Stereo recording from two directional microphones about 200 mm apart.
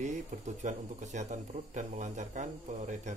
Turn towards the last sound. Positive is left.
turn(degrees=-35)  # may be behind; listen again after turning